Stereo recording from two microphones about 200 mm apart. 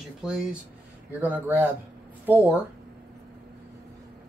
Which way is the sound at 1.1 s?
10° right (ahead or behind).